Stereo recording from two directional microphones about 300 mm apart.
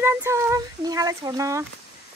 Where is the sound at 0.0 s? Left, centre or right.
Centre.